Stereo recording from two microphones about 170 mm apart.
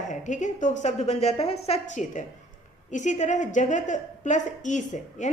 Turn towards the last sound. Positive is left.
turn(degrees=45)  # may be behind; listen again after turning